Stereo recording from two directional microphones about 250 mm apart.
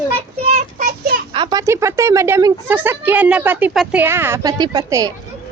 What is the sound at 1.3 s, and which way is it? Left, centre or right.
A woman's voice, centre.